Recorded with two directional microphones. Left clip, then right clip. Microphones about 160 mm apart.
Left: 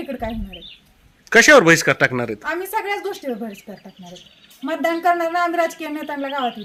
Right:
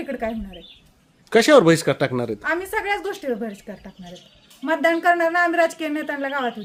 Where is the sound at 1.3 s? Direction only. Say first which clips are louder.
Left 3 dB; 5° right (ahead or behind).